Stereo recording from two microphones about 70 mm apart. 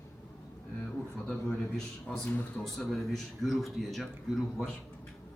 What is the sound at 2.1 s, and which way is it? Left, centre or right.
A man's voice, centre.